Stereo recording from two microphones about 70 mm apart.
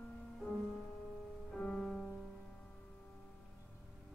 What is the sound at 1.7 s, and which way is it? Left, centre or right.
Music, centre.